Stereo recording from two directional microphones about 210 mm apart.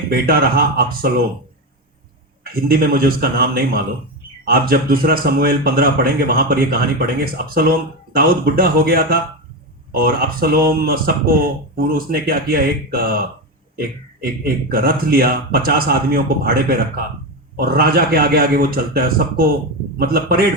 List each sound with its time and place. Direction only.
0.1 s speech: 45° right (ahead or behind)
2.4 s speech: 45° right (ahead or behind)